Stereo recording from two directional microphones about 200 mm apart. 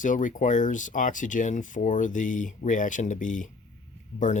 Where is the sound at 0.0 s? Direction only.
40° left (ahead or behind).